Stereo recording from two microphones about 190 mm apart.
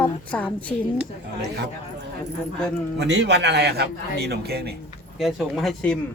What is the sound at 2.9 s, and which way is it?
Speech, 65° right (ahead or behind).